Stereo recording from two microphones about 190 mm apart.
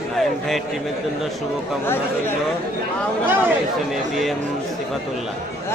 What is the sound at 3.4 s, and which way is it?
Speech, centre (ahead or behind).